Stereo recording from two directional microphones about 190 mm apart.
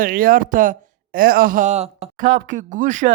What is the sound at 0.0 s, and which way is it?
Speech, 50° right (ahead or behind).